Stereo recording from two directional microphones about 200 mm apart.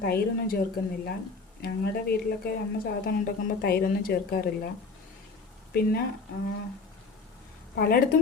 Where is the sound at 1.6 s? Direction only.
50° left (ahead or behind).